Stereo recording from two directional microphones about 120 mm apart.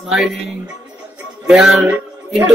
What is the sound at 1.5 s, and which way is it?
Speech, 5° right (ahead or behind).